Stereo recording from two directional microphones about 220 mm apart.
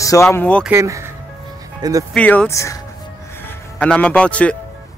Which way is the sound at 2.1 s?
5° left (ahead or behind).